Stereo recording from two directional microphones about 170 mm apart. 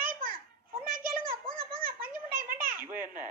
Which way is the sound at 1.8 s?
55° right (ahead or behind).